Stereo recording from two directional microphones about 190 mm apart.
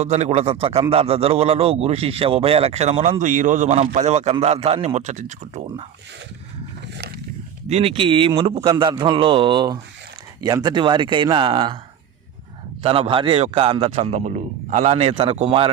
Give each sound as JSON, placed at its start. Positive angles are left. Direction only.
{"t": 0.0, "sound": "a man's voice", "side_deg": -35}
{"t": 7.7, "sound": "a man's voice", "side_deg": -30}
{"t": 12.8, "sound": "a man's voice", "side_deg": -30}